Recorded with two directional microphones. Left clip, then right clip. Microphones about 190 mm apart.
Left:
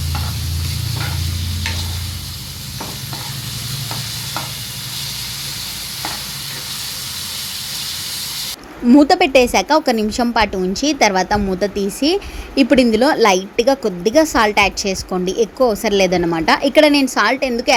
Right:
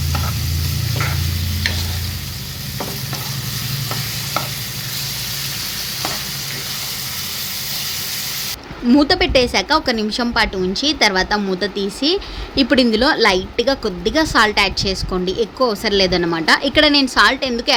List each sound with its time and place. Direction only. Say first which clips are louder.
8.9 s a woman's voice: left 3 dB; 20° left (ahead or behind)